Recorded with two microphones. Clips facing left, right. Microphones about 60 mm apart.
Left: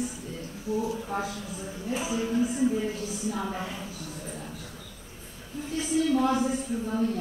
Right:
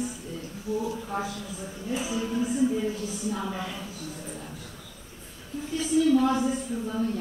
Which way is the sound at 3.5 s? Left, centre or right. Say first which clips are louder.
Even; left.